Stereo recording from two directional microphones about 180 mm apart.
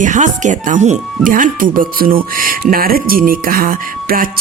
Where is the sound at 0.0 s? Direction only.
45° right (ahead or behind).